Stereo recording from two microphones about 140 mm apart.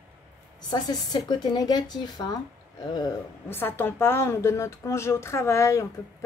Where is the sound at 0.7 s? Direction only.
30° left (ahead or behind).